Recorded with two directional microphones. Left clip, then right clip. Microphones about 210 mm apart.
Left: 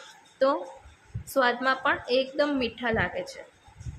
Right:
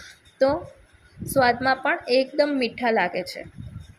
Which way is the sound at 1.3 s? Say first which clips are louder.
Right 4 dB; 20° right (ahead or behind).